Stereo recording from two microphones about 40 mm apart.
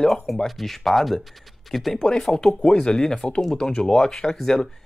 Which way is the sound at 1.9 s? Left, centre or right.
Centre.